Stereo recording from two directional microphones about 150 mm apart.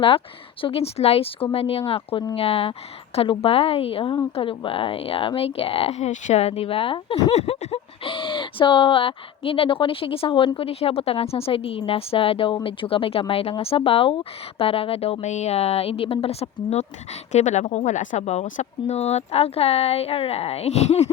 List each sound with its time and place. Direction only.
0.6 s speech: 40° left (ahead or behind)
7.3 s speech: 45° left (ahead or behind)